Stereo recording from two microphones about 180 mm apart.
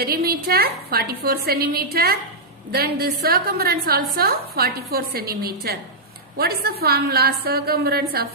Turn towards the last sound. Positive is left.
turn(degrees=-60)  # may be behind; listen again after turning